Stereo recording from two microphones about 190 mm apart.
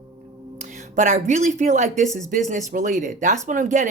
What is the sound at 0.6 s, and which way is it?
A woman's voice, 40° right (ahead or behind).